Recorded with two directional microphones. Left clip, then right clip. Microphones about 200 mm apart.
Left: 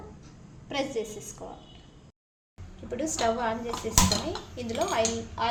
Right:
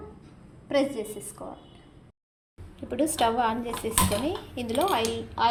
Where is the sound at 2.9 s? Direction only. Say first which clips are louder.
Right 3 dB; 30° right (ahead or behind).